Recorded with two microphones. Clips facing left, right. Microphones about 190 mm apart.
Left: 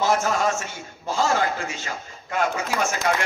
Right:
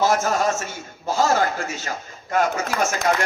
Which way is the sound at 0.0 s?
40° right (ahead or behind).